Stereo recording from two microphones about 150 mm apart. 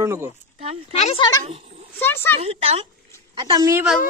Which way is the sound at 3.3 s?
30° right (ahead or behind).